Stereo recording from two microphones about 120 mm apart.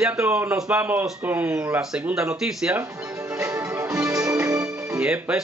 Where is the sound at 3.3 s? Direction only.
25° right (ahead or behind).